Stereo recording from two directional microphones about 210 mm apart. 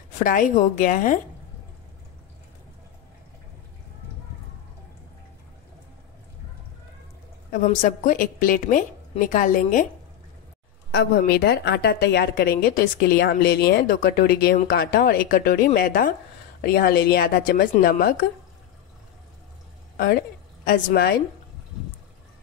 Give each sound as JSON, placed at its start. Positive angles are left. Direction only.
{"t": 0.2, "sound": "a woman's voice", "side_deg": 40}
{"t": 7.5, "sound": "a woman's voice", "side_deg": 40}
{"t": 10.9, "sound": "a woman's voice", "side_deg": 50}
{"t": 20.0, "sound": "a woman's voice", "side_deg": 45}